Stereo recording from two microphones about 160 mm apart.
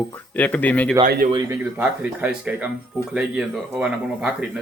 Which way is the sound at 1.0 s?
60° right (ahead or behind).